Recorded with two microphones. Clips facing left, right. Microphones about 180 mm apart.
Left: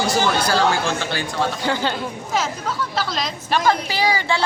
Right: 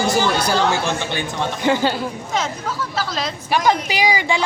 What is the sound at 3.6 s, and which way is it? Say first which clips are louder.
Speech: right 1 dB; 15° right (ahead or behind).